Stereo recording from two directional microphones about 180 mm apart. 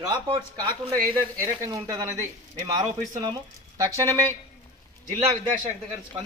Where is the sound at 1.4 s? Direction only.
15° right (ahead or behind).